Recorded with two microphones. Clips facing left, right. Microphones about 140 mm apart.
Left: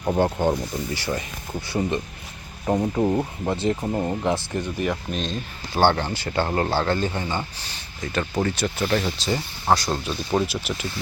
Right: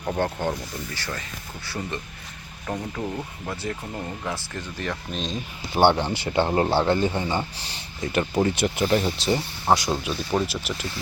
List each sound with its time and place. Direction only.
0.0 s speech: 15° left (ahead or behind)
3.8 s speech: 35° left (ahead or behind)
4.3 s speech: 20° left (ahead or behind)
5.1 s speech: centre (ahead or behind)
5.8 s speech: 20° right (ahead or behind)
9.9 s speech: 5° right (ahead or behind)